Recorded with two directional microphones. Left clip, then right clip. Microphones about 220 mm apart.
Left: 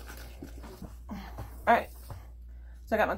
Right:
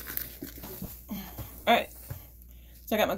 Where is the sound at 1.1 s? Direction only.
40° right (ahead or behind).